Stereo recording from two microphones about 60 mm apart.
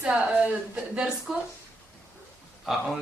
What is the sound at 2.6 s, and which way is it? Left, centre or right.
Speech, centre.